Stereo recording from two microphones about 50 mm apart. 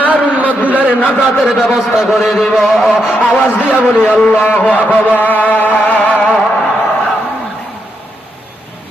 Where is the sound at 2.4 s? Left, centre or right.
Centre.